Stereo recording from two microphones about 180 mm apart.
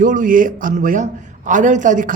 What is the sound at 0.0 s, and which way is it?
A man's voice, 45° right (ahead or behind).